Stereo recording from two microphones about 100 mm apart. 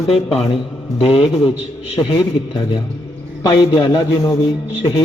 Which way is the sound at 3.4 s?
50° left (ahead or behind).